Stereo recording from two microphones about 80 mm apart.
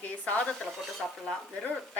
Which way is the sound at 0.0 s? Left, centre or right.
Centre.